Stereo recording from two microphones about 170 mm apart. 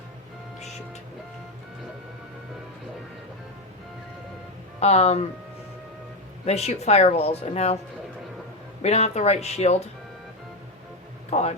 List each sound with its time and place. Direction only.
4.8 s speech: 40° left (ahead or behind)
6.4 s speech: 40° left (ahead or behind)
8.8 s speech: 40° left (ahead or behind)
11.3 s a sound: 40° left (ahead or behind)